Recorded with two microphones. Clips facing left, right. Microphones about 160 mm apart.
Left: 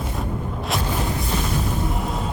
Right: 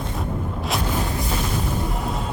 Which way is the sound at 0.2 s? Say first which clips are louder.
Even; centre (ahead or behind).